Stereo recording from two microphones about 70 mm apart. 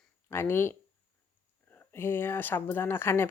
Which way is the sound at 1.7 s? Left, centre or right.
Left.